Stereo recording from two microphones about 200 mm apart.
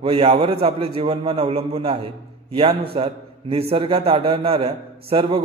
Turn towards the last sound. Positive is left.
turn(degrees=-25)  # may be behind; listen again after turning